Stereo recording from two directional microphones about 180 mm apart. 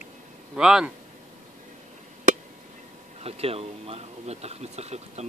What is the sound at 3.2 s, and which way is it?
Speech, 35° right (ahead or behind).